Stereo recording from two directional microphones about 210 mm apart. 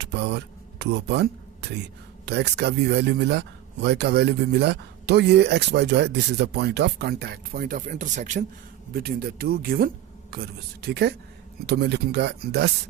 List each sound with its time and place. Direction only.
0.0 s speech: 55° right (ahead or behind); by 8.4 s 35° right (ahead or behind)
8.9 s speech: 45° right (ahead or behind)